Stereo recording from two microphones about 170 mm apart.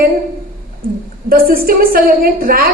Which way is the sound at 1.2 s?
60° right (ahead or behind).